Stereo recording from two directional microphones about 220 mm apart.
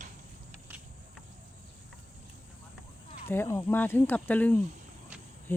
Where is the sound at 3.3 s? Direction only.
10° left (ahead or behind).